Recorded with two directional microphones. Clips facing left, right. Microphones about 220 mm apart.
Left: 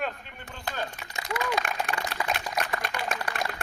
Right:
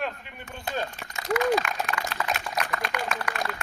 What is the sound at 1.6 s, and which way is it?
Speech, 50° left (ahead or behind).